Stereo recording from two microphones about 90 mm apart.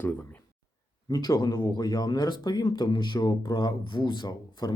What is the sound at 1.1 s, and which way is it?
Speech, 45° left (ahead or behind).